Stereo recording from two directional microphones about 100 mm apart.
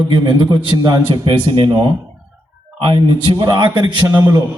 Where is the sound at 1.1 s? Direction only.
60° right (ahead or behind).